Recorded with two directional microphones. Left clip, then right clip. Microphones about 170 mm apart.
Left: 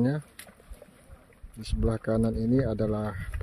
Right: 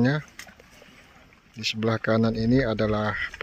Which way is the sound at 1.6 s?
5° left (ahead or behind).